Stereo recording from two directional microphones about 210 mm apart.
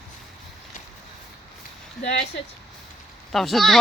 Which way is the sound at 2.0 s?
30° left (ahead or behind).